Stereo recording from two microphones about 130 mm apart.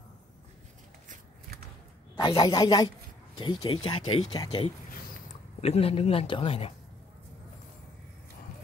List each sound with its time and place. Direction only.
2.1 s speech: 35° left (ahead or behind)
4.3 s speech: 35° left (ahead or behind)
5.6 s speech: 50° left (ahead or behind)